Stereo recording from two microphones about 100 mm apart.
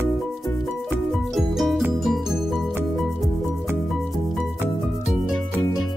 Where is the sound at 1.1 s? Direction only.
Centre (ahead or behind).